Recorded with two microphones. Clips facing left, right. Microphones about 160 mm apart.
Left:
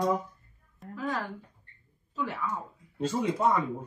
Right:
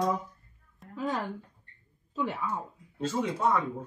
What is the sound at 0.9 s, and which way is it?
Speech, 20° right (ahead or behind).